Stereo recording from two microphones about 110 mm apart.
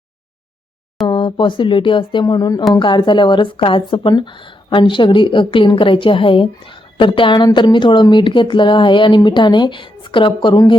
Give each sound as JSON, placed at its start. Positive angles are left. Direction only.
{"t": 1.0, "sound": "speech", "side_deg": 45}
{"t": 2.2, "sound": "a woman's voice", "side_deg": 35}